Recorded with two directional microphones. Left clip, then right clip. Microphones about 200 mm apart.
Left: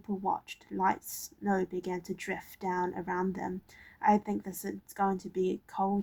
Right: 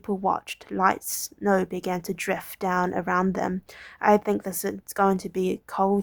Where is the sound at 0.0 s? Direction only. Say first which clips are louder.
Right 8 dB; 35° right (ahead or behind).